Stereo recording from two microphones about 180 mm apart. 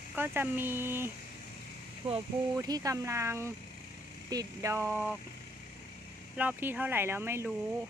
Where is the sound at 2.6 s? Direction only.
20° right (ahead or behind).